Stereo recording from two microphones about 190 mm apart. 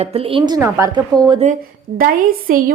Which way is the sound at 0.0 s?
30° right (ahead or behind).